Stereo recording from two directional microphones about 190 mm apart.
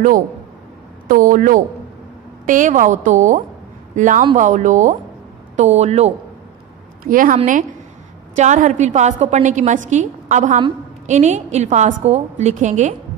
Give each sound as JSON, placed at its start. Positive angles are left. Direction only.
{"t": 1.0, "sound": "a woman's voice", "side_deg": -45}
{"t": 7.0, "sound": "a woman's voice", "side_deg": -45}